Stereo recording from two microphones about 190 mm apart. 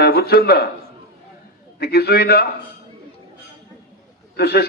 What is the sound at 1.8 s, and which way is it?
Speech, 55° left (ahead or behind).